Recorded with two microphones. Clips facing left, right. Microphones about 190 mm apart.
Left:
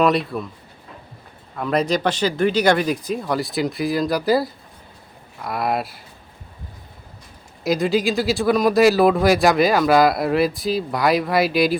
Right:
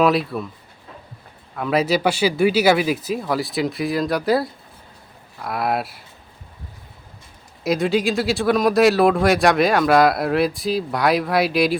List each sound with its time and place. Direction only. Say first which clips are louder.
0.0 s speech: even; centre (ahead or behind)
1.5 s speech: right 1 dB; 5° right (ahead or behind)
7.6 s speech: even; centre (ahead or behind)